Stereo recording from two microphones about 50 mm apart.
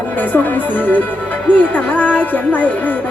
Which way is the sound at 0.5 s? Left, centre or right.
Left.